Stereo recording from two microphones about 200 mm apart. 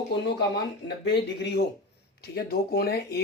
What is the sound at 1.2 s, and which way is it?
Speech, 60° left (ahead or behind).